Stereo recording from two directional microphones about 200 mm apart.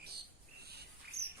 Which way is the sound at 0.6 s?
55° right (ahead or behind).